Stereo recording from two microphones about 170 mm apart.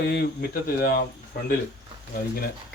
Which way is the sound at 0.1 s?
65° left (ahead or behind).